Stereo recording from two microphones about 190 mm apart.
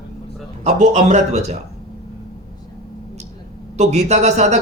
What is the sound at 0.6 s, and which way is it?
Speech, 40° right (ahead or behind).